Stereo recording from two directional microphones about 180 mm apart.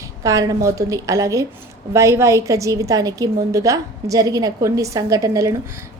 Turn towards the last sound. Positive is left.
turn(degrees=-20)  # may be behind; listen again after turning